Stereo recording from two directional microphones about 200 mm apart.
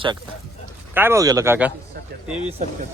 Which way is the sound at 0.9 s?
15° right (ahead or behind).